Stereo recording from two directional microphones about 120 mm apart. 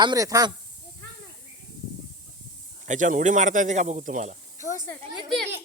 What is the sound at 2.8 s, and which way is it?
Speech, 90° right.